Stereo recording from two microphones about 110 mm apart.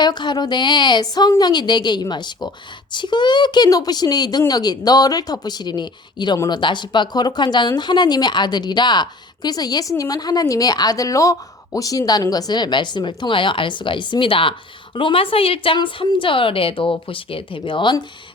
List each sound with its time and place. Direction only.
0.0 s a woman's voice: 40° left (ahead or behind)